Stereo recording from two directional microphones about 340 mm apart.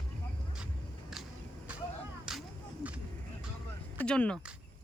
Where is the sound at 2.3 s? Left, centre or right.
Centre.